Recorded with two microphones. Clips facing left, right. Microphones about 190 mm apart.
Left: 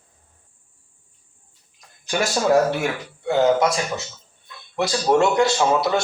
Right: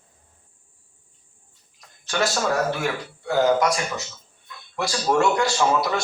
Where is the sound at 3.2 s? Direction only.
25° left (ahead or behind).